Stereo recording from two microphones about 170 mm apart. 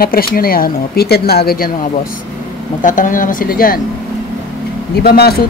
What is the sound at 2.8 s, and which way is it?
Speech, 50° left (ahead or behind).